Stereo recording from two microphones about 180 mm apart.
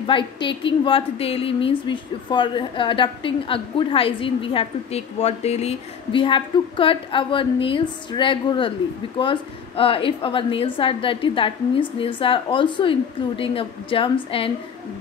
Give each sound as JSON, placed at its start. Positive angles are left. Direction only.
{"t": 0.0, "sound": "a woman's voice", "side_deg": 25}